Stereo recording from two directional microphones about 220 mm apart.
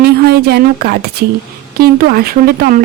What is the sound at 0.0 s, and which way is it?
A woman's voice, 45° right (ahead or behind).